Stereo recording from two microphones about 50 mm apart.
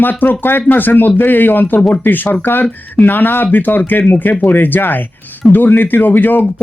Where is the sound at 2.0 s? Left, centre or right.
Left.